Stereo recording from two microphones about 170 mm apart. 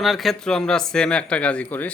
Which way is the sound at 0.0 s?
Centre (ahead or behind).